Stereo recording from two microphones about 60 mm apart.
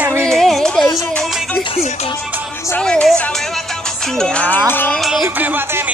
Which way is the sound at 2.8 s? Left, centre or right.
Centre.